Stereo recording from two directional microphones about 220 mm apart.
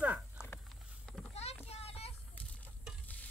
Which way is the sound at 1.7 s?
25° left (ahead or behind).